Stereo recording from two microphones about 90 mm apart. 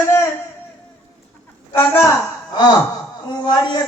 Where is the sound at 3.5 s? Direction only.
50° left (ahead or behind).